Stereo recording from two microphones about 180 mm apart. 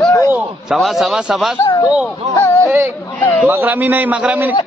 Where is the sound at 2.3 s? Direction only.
10° left (ahead or behind).